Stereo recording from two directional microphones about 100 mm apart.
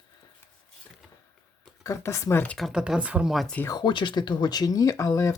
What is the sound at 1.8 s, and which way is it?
Speech, 30° left (ahead or behind).